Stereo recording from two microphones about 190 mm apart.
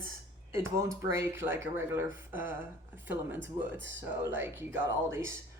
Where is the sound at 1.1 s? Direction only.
15° right (ahead or behind).